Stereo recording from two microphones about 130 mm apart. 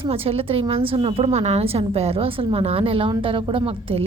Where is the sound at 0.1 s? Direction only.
50° right (ahead or behind).